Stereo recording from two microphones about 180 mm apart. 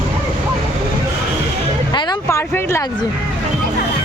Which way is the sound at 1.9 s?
20° left (ahead or behind).